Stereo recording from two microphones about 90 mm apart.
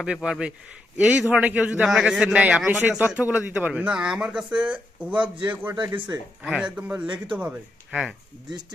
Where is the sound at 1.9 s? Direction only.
5° right (ahead or behind).